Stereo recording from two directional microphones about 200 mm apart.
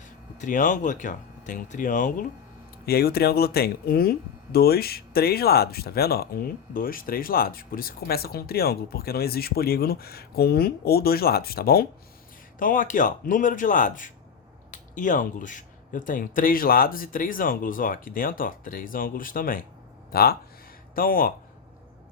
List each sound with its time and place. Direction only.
0.0 s speech: 40° left (ahead or behind)
2.8 s speech: 50° left (ahead or behind)